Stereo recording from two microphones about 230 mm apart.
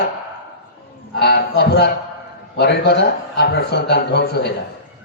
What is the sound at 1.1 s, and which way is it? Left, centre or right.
A man's voice, left.